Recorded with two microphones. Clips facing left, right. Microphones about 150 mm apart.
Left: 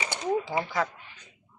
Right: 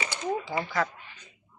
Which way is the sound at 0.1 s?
20° left (ahead or behind).